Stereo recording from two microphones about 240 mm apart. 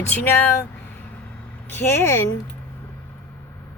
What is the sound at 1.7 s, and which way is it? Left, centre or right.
Speech, centre.